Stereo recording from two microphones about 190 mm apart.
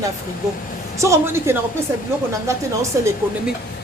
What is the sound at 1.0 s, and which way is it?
Speech, 15° right (ahead or behind).